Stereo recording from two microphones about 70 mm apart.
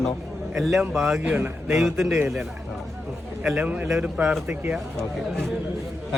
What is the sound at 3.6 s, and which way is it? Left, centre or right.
Speech, right.